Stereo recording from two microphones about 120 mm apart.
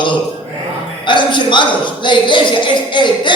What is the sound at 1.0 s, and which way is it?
Speech, 40° left (ahead or behind).